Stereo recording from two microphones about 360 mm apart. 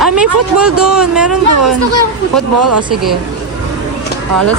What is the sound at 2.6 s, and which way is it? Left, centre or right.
Speech, right.